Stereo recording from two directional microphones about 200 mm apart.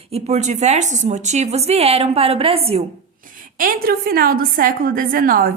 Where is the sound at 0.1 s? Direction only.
35° right (ahead or behind).